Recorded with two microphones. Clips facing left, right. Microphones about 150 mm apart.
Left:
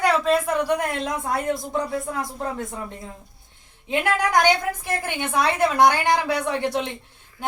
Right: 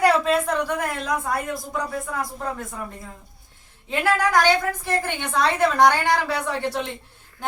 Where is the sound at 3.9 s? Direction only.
15° left (ahead or behind).